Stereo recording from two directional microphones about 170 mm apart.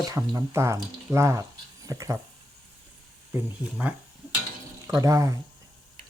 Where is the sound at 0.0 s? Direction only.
20° right (ahead or behind).